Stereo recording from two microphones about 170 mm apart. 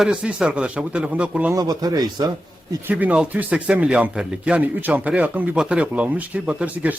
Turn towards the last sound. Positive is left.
turn(degrees=-10)  # may be behind; listen again after turning